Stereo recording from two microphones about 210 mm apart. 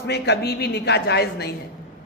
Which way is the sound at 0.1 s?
50° left (ahead or behind).